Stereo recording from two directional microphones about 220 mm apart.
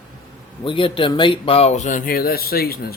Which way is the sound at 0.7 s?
25° left (ahead or behind).